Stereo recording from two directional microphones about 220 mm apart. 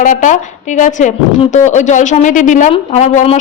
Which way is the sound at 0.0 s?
35° left (ahead or behind).